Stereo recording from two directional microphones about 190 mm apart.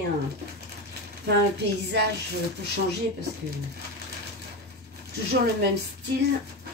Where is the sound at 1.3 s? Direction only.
60° right (ahead or behind).